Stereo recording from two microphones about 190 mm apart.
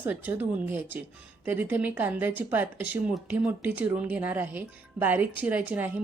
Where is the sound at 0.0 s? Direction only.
10° right (ahead or behind).